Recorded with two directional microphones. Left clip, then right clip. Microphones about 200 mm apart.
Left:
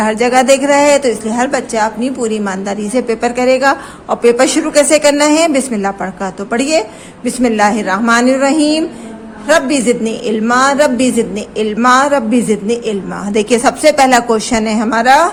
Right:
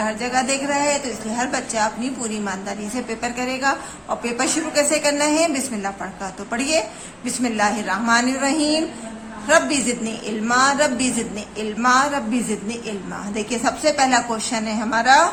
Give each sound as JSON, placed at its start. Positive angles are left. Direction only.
{"t": 0.0, "sound": "a woman's voice", "side_deg": 40}